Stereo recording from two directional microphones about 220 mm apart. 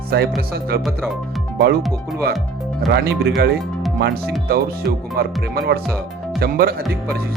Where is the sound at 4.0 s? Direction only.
45° right (ahead or behind).